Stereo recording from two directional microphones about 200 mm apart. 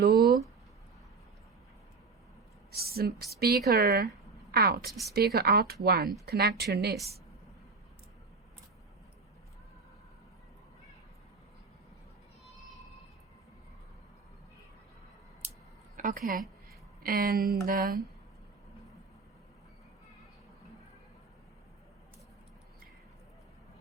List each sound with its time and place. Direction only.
0.0 s speech: 50° right (ahead or behind)
2.7 s speech: 50° right (ahead or behind)
16.0 s a woman's voice: 40° right (ahead or behind)